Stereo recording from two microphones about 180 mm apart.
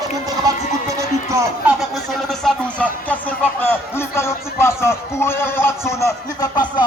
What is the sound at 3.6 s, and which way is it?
A man's voice, 15° left (ahead or behind).